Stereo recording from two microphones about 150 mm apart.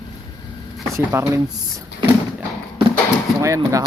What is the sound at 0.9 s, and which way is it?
Speech, 20° right (ahead or behind).